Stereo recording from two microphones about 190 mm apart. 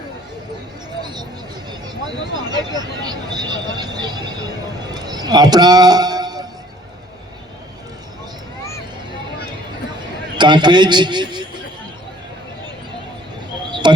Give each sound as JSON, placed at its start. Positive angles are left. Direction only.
{"t": 2.5, "sound": "speech", "side_deg": -20}
{"t": 4.9, "sound": "a sound", "side_deg": -20}
{"t": 10.3, "sound": "a man's voice", "side_deg": -25}
{"t": 13.8, "sound": "music", "side_deg": -25}